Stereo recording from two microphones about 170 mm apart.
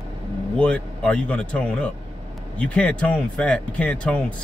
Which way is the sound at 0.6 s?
5° left (ahead or behind).